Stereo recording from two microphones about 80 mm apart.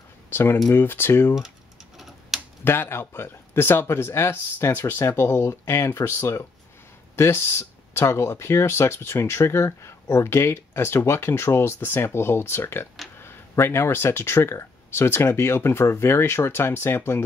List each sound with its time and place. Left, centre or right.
0.3 s speech: left
2.0 s tick-tock: centre
2.6 s speech: left